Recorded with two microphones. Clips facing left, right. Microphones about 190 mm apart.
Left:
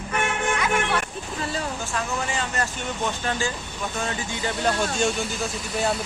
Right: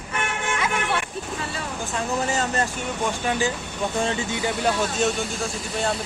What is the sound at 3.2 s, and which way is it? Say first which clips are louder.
Speech: right 3 dB; 15° right (ahead or behind).